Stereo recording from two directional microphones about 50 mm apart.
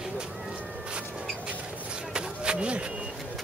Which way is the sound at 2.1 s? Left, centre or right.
Centre.